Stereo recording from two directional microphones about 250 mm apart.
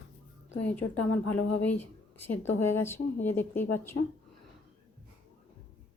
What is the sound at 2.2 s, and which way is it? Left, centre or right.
Speech, centre.